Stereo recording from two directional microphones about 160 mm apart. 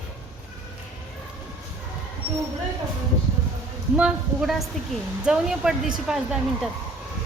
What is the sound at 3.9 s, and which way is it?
Speech, 5° right (ahead or behind).